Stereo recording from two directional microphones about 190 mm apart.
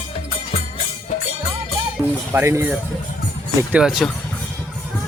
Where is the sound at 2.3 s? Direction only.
15° right (ahead or behind).